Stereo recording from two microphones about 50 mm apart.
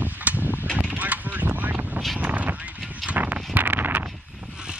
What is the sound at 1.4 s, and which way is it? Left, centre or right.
Vehicle, right.